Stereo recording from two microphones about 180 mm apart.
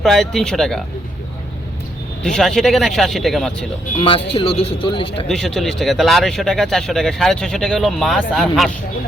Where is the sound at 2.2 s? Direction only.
5° left (ahead or behind).